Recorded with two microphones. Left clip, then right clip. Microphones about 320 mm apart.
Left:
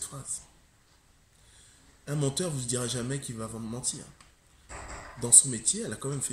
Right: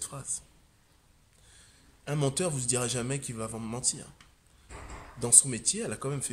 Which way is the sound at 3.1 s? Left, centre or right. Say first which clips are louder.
Right 1 dB; centre.